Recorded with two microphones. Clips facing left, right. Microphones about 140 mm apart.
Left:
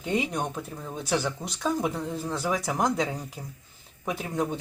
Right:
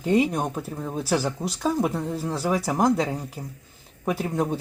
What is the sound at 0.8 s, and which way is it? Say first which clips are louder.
Speech: right 6 dB; 30° right (ahead or behind).